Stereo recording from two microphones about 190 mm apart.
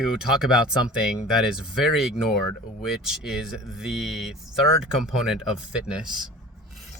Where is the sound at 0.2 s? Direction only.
5° right (ahead or behind).